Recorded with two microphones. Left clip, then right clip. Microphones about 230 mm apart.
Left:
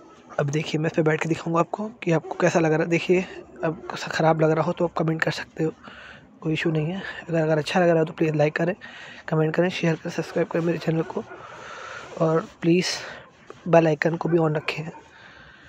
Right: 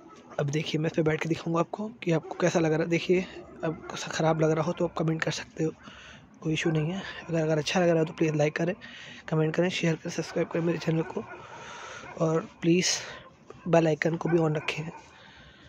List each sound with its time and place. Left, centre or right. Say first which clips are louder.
0.4 s speech: left 4 dB; centre